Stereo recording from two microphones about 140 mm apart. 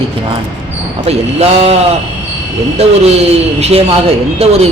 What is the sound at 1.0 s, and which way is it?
Speech, 45° right (ahead or behind).